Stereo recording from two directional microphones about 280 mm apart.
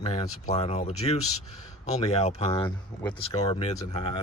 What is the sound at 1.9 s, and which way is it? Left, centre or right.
Speech, left.